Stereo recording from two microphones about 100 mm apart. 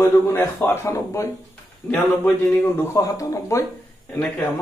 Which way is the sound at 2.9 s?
35° left (ahead or behind).